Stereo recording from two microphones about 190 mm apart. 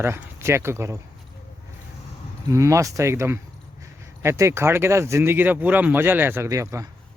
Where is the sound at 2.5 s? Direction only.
15° right (ahead or behind).